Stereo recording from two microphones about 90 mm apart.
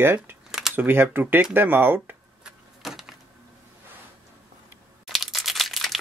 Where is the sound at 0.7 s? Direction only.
25° right (ahead or behind).